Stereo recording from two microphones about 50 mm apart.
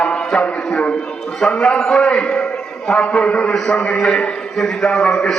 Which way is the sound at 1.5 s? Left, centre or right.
Centre.